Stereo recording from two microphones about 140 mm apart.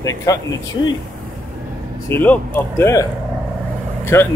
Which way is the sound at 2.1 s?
15° left (ahead or behind).